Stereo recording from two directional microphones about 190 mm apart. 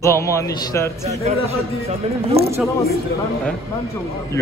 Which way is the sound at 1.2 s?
35° right (ahead or behind).